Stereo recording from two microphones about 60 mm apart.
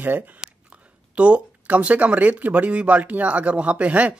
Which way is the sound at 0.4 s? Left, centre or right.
Centre.